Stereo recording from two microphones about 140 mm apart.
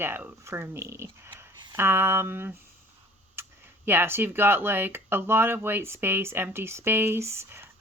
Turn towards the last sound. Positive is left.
turn(degrees=-20)  # may be behind; listen again after turning